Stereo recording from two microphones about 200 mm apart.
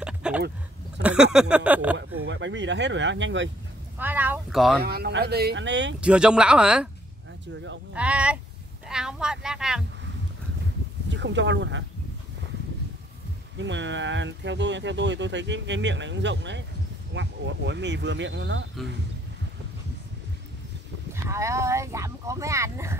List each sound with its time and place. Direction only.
0.0 s a sound: 5° right (ahead or behind)
1.0 s speech: 5° right (ahead or behind)
2.2 s speech: 65° right (ahead or behind)
4.0 s speech: 10° right (ahead or behind)
4.8 s speech: 50° right (ahead or behind)
5.9 s speech: 5° right (ahead or behind)
7.9 s speech: 5° right (ahead or behind)
11.1 s speech: 65° right (ahead or behind)
13.6 s speech: 65° right (ahead or behind)
21.1 s speech: 15° right (ahead or behind)